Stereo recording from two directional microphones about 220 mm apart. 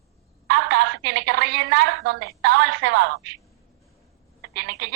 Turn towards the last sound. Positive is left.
turn(degrees=-50)  # may be behind; listen again after turning